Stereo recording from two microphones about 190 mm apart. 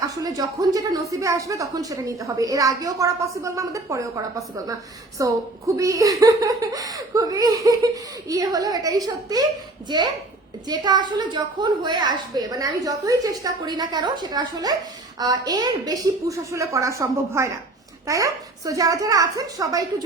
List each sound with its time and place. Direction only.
0.1 s a woman's voice: 20° right (ahead or behind)
10.7 s a woman's voice: 20° right (ahead or behind)